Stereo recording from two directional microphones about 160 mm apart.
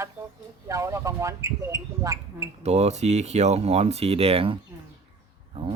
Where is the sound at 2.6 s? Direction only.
45° right (ahead or behind).